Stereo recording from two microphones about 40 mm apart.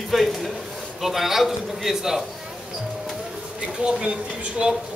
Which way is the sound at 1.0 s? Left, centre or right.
Centre.